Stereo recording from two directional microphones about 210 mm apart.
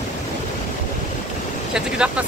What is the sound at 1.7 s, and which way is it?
Speech, 5° right (ahead or behind).